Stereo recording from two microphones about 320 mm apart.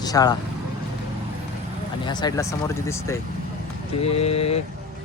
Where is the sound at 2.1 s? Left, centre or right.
Centre.